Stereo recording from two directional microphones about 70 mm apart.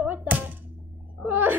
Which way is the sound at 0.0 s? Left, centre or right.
Right.